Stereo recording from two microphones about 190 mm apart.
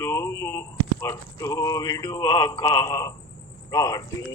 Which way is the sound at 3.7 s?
20° left (ahead or behind).